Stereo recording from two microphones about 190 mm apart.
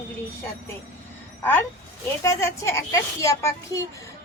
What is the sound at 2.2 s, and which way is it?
A woman's voice, 15° left (ahead or behind).